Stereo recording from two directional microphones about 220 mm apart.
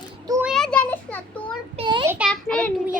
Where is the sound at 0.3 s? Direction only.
10° right (ahead or behind).